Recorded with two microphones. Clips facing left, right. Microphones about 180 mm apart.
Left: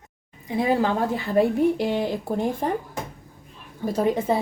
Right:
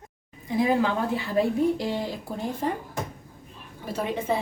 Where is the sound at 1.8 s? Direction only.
65° left (ahead or behind).